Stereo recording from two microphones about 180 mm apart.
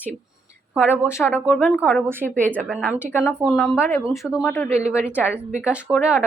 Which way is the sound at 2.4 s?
5° left (ahead or behind).